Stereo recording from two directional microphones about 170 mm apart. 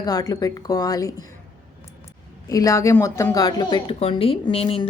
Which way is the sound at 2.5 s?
20° left (ahead or behind).